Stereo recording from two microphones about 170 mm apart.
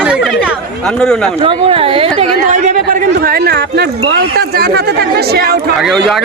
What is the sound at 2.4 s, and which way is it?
Speech, 45° right (ahead or behind).